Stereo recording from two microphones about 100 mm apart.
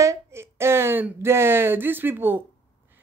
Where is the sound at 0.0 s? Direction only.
30° right (ahead or behind).